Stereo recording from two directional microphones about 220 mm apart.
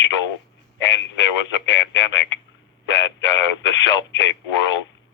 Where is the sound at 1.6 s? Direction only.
55° left (ahead or behind).